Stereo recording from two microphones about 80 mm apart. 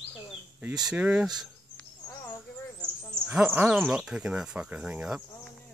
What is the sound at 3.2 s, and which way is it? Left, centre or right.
Speech, right.